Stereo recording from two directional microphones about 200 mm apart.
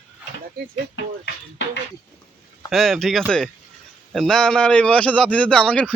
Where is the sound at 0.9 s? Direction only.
60° left (ahead or behind).